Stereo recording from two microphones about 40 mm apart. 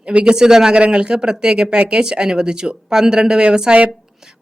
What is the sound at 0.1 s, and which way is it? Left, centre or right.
Speech, right.